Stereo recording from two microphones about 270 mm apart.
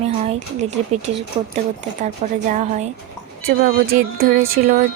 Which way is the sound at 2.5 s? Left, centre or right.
Right.